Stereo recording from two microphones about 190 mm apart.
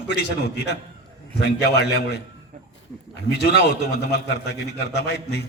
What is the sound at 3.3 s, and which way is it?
A man's voice, 60° left (ahead or behind).